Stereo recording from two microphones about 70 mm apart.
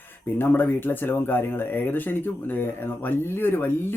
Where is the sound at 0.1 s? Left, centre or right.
Left.